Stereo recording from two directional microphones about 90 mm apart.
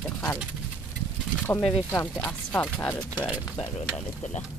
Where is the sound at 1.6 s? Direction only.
5° left (ahead or behind).